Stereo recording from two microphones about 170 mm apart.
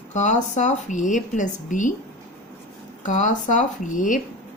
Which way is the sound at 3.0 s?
45° left (ahead or behind).